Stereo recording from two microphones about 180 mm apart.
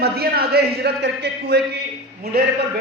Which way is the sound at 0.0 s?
60° right (ahead or behind).